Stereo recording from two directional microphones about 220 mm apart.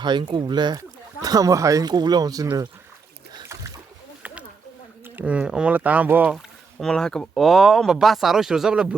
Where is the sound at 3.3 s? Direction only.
15° right (ahead or behind).